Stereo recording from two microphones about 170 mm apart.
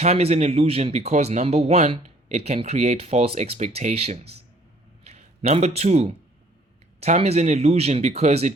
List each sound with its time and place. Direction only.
0.0 s a man's voice: 40° right (ahead or behind)